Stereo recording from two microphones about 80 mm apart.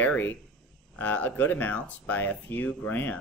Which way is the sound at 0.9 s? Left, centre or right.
Left.